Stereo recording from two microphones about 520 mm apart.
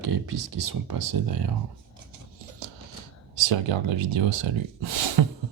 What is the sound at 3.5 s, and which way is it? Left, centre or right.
Speech, right.